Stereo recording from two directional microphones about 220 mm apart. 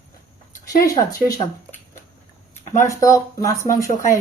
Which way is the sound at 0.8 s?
15° left (ahead or behind).